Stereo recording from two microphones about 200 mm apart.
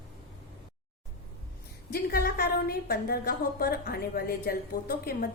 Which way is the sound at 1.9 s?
50° left (ahead or behind).